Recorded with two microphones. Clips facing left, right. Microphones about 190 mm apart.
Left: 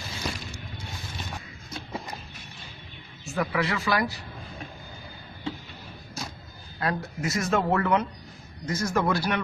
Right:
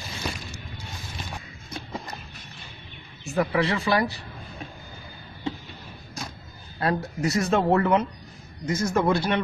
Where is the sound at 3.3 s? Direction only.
30° right (ahead or behind).